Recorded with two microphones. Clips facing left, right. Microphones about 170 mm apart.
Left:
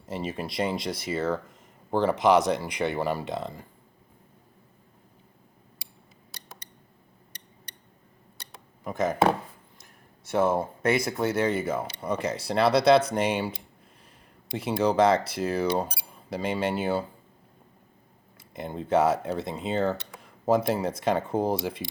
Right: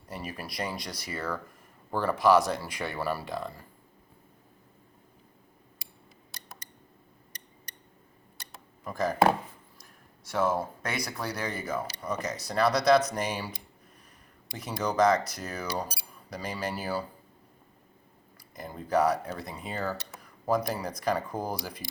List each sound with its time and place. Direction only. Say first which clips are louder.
0.0 s speech: left 7 dB; 25° left (ahead or behind)
7.3 s a sound: even; 30° left (ahead or behind)
10.2 s speech: left 4 dB; 25° left (ahead or behind)
18.3 s speech: left 6 dB; 25° left (ahead or behind)